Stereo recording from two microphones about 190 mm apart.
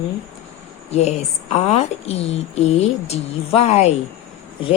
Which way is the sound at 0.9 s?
35° left (ahead or behind).